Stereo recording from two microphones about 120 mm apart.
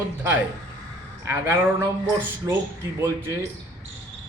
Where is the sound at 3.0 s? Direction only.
20° right (ahead or behind).